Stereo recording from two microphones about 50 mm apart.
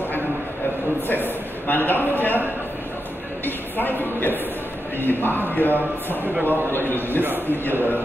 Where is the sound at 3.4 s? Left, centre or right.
Left.